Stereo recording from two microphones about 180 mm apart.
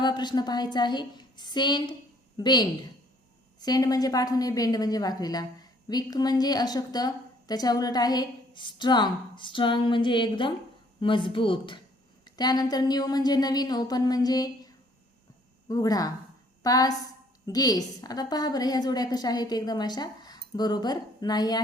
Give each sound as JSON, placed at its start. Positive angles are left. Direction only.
{"t": 0.0, "sound": "a woman's voice", "side_deg": 25}
{"t": 15.7, "sound": "a woman's voice", "side_deg": 20}